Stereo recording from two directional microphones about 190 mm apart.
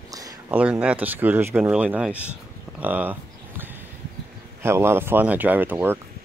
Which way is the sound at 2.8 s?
10° right (ahead or behind).